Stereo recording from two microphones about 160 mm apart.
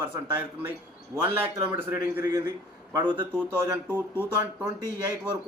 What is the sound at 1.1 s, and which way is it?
A man's voice, 15° right (ahead or behind).